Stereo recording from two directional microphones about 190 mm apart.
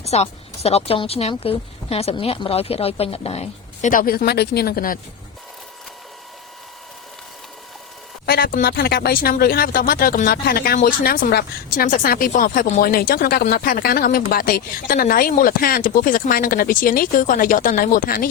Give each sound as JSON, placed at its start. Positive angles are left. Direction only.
{"t": 0.0, "sound": "speech", "side_deg": 35}
{"t": 8.3, "sound": "speech", "side_deg": 50}
{"t": 12.8, "sound": "speech", "side_deg": 50}